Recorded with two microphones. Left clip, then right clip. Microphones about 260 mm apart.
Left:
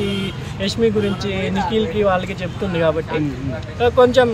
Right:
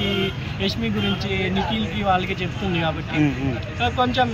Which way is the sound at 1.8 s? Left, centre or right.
Centre.